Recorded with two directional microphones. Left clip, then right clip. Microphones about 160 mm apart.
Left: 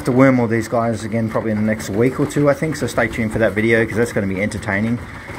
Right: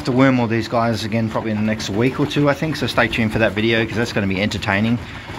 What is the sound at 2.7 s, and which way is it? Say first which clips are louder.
Speech: right 1 dB; 25° left (ahead or behind).